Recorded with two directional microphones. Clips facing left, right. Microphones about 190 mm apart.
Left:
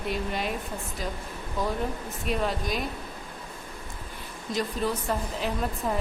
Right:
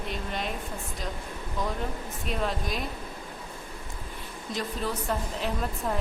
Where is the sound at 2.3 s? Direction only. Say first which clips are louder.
Left 3 dB; centre (ahead or behind).